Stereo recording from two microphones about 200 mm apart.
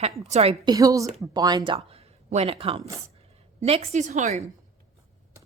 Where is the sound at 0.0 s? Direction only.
30° right (ahead or behind).